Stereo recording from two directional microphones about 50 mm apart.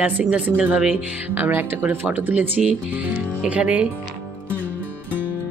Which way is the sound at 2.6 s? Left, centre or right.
Right.